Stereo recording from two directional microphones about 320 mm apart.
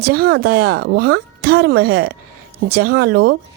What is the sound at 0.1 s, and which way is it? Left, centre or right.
Speech, right.